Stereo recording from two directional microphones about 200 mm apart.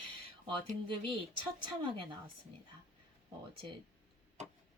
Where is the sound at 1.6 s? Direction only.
25° right (ahead or behind).